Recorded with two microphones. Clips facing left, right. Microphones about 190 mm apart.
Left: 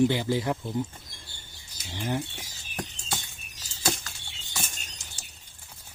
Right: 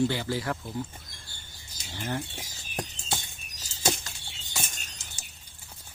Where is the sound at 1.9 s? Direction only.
15° left (ahead or behind).